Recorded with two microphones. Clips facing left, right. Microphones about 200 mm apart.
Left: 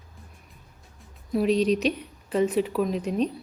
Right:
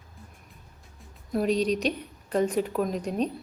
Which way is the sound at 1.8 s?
40° right (ahead or behind).